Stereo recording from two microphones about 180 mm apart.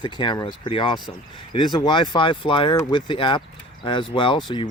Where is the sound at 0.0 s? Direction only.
25° left (ahead or behind).